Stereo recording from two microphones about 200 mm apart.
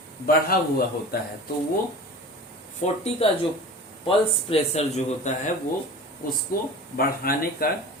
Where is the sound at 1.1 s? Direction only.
50° left (ahead or behind).